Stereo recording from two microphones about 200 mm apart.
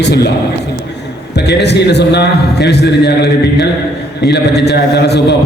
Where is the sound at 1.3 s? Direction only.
55° left (ahead or behind).